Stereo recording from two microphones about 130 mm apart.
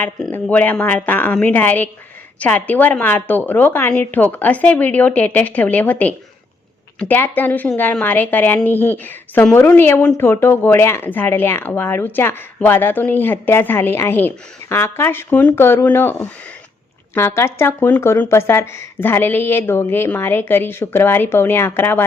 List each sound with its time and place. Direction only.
0.3 s speech: 15° left (ahead or behind)